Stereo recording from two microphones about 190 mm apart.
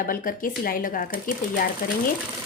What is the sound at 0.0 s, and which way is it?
Speech, 45° left (ahead or behind).